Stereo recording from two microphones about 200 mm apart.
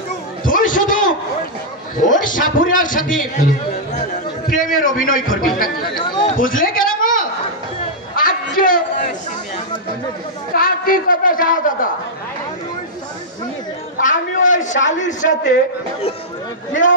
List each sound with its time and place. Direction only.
0.5 s a sound: 40° left (ahead or behind)
2.0 s a man's voice: 40° left (ahead or behind)
4.6 s speech: 40° left (ahead or behind)
5.9 s speech: 20° left (ahead or behind)
6.4 s a sound: 45° left (ahead or behind)
10.5 s speech: 45° left (ahead or behind)
14.0 s a man's voice: 40° left (ahead or behind)